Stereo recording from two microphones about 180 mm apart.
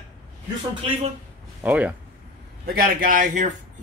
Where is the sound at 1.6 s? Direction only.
5° right (ahead or behind).